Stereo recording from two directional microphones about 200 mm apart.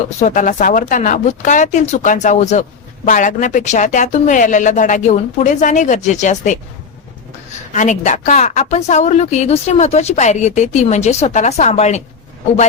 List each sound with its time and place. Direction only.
0.2 s speech: 40° left (ahead or behind)
7.7 s speech: 35° left (ahead or behind)